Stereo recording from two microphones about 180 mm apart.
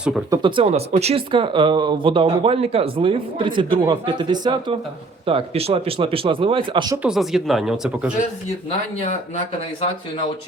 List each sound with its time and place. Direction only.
0.3 s speech: 25° right (ahead or behind)
7.0 s speech: centre (ahead or behind)